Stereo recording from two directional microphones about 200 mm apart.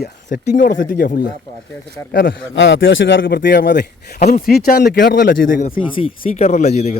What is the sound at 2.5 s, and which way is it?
Speech, 70° left (ahead or behind).